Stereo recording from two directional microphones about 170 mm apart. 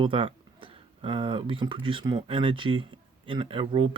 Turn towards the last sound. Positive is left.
turn(degrees=-30)  # may be behind; listen again after turning